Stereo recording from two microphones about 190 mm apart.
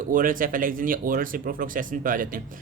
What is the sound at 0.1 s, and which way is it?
Speech, 45° right (ahead or behind).